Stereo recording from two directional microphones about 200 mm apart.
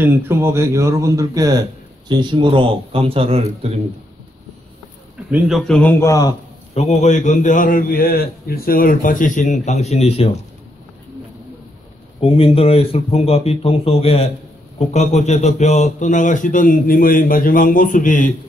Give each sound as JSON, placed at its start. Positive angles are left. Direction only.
{"t": 0.0, "sound": "a man's voice", "side_deg": -10}
{"t": 5.3, "sound": "a man's voice", "side_deg": 0}
{"t": 6.7, "sound": "a man's voice", "side_deg": 35}
{"t": 12.2, "sound": "a man's voice", "side_deg": 30}